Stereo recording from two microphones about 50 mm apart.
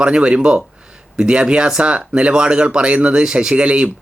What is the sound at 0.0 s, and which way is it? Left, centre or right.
Speech, right.